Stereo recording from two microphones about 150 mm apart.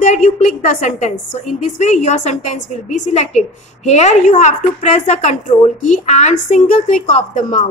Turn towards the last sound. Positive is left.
turn(degrees=55)  # may be behind; listen again after turning